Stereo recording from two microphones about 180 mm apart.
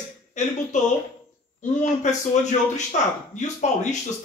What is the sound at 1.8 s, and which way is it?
Speech, 40° left (ahead or behind).